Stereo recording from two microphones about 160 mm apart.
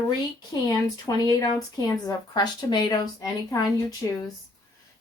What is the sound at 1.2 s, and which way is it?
Speech, 20° left (ahead or behind).